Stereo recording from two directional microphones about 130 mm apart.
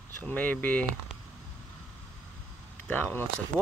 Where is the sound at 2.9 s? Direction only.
15° left (ahead or behind).